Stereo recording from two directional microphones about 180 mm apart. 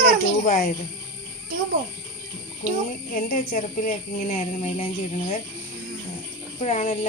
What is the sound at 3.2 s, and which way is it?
Speech, 50° left (ahead or behind).